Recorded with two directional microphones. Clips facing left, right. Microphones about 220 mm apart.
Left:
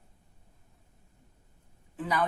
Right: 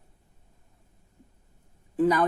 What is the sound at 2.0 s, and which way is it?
Speech, 45° right (ahead or behind).